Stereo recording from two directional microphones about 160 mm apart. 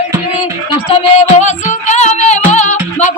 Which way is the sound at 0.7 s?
40° left (ahead or behind).